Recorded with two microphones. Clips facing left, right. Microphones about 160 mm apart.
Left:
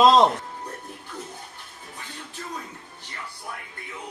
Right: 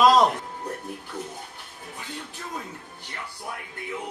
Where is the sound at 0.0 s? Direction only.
25° left (ahead or behind).